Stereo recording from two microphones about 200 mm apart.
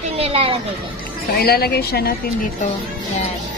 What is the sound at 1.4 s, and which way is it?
Speech, 50° left (ahead or behind).